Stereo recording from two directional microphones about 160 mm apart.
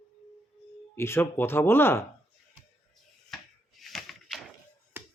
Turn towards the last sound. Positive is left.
turn(degrees=-15)  # may be behind; listen again after turning